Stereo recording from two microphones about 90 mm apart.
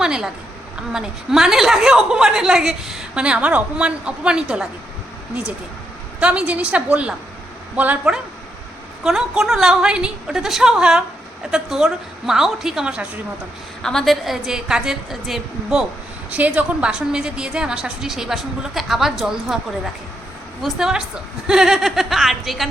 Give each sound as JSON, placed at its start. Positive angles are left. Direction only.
{"t": 0.0, "sound": "a sound", "side_deg": -10}
{"t": 0.9, "sound": "a woman's voice", "side_deg": -5}
{"t": 6.1, "sound": "a woman's voice", "side_deg": -15}
{"t": 9.0, "sound": "a woman's voice", "side_deg": -5}
{"t": 13.8, "sound": "a woman's voice", "side_deg": 5}
{"t": 16.3, "sound": "a woman's voice", "side_deg": -15}